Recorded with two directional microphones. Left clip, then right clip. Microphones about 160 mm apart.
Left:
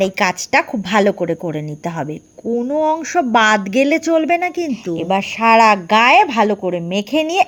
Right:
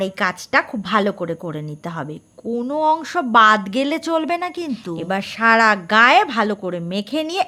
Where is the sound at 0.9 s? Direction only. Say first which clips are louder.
Left 4 dB; 10° left (ahead or behind).